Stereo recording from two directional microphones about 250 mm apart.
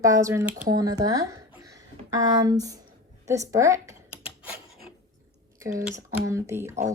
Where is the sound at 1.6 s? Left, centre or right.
Centre.